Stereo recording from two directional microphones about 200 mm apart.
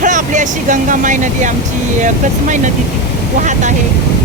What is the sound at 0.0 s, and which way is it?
Speech, 40° right (ahead or behind).